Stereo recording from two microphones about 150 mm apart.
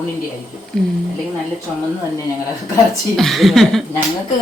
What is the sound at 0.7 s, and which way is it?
Speech, 5° left (ahead or behind).